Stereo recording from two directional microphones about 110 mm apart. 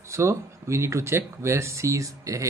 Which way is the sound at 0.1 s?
25° right (ahead or behind).